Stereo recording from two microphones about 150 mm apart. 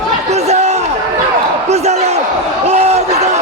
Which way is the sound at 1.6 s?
45° right (ahead or behind).